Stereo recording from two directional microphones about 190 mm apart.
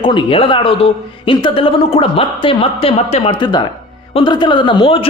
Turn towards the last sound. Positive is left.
turn(degrees=30)  # may be behind; listen again after turning